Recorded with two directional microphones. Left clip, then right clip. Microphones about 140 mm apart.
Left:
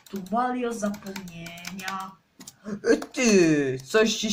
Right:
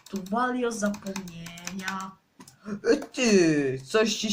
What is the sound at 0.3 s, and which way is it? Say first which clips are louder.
Speech: left 1 dB; 45° right (ahead or behind).